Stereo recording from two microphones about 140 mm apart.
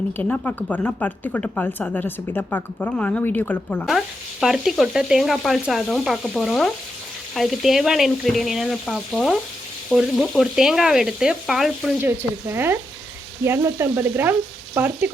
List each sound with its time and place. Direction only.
0.2 s a woman's voice: 10° left (ahead or behind)
3.8 s sizzle: centre (ahead or behind)
12.0 s frying: 15° right (ahead or behind)